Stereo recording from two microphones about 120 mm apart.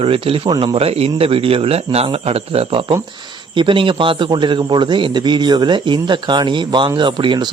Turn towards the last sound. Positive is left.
turn(degrees=-40)  # may be behind; listen again after turning